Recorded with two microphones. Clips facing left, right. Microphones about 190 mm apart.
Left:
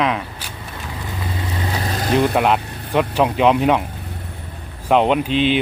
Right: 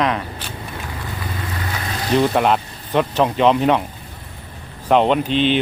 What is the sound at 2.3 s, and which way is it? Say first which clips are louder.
Speech: even; 5° left (ahead or behind).